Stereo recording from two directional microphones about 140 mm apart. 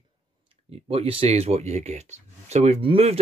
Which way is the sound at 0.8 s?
40° right (ahead or behind).